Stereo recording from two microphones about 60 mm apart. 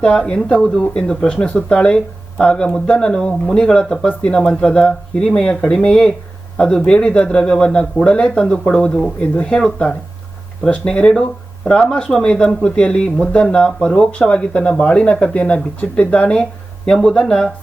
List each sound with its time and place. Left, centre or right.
0.5 s speech: centre